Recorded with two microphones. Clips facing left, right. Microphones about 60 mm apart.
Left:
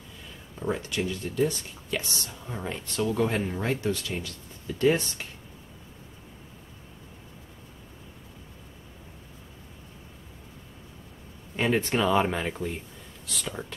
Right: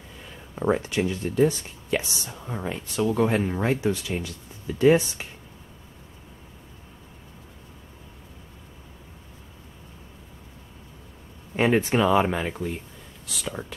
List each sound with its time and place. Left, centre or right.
0.6 s speech: right; by 5.3 s centre
11.5 s speech: right
11.8 s speech: centre